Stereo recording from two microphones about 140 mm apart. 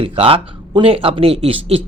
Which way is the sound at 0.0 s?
40° right (ahead or behind).